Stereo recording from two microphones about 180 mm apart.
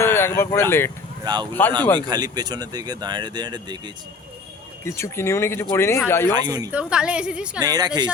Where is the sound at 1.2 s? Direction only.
25° right (ahead or behind).